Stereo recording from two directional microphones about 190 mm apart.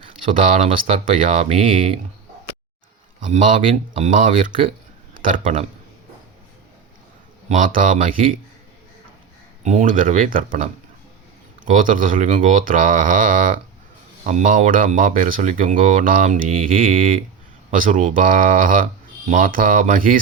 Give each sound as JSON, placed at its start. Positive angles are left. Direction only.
{"t": 0.5, "sound": "speech", "side_deg": -30}
{"t": 3.2, "sound": "speech", "side_deg": -40}
{"t": 5.4, "sound": "a man's voice", "side_deg": -30}
{"t": 7.4, "sound": "speech", "side_deg": -40}
{"t": 9.6, "sound": "speech", "side_deg": -40}